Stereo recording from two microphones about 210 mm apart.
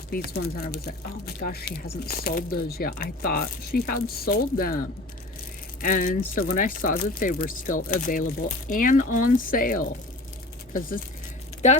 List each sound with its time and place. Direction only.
0.1 s speech: 45° left (ahead or behind)
5.8 s speech: 40° left (ahead or behind)